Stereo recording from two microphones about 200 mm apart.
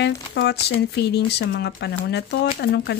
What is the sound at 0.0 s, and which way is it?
Speech, 60° left (ahead or behind).